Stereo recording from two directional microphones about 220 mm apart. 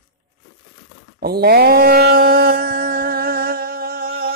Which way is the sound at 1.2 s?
45° right (ahead or behind).